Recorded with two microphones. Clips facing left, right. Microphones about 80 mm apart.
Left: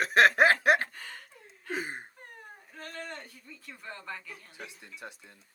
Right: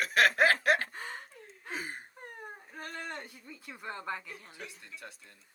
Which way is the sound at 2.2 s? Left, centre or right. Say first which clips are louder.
Right 4 dB; centre.